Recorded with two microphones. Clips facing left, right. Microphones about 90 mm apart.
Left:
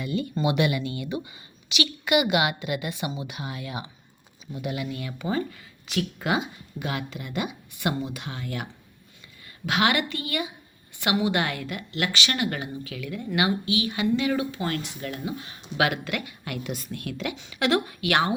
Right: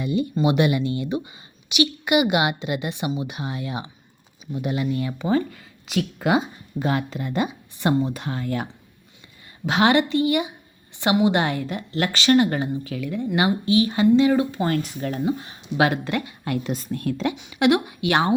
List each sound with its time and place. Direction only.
0.0 s a woman's voice: 20° right (ahead or behind)
17.5 s a woman's voice: 20° right (ahead or behind)